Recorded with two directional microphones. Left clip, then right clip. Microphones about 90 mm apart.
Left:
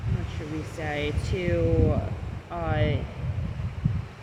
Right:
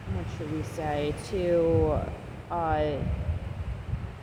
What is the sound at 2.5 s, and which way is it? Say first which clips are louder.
Speech: right 2 dB; 35° left (ahead or behind).